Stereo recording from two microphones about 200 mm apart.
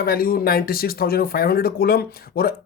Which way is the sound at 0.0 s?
45° left (ahead or behind).